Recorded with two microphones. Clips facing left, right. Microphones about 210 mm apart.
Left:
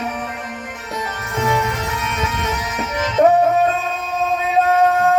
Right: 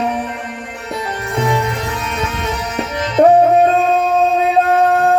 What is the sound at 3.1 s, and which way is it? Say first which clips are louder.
Music: right 4 dB; 35° right (ahead or behind).